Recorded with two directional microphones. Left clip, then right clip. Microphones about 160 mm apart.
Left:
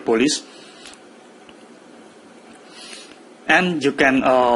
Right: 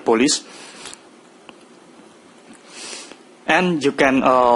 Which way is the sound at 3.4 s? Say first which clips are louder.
Even; 30° right (ahead or behind).